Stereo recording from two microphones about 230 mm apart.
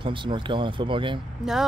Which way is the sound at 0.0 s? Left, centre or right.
Right.